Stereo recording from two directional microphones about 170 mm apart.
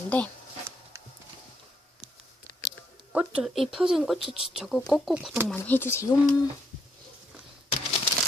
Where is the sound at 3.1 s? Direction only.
5° right (ahead or behind).